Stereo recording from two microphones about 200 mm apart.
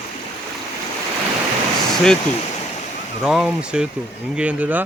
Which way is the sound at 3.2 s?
Centre (ahead or behind).